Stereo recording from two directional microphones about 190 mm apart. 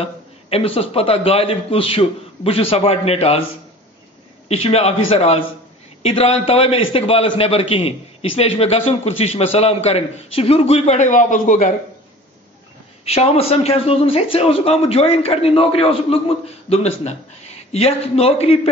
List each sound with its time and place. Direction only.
0.0 s a man's voice: 30° left (ahead or behind)
4.5 s a man's voice: 30° left (ahead or behind)
13.0 s a man's voice: 35° left (ahead or behind)